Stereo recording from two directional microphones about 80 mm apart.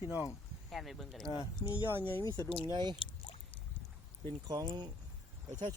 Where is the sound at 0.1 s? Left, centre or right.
Left.